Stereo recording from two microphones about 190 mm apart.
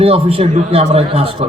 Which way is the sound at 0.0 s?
30° right (ahead or behind).